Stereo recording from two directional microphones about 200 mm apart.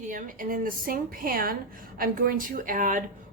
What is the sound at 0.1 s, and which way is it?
A woman's voice, 45° right (ahead or behind).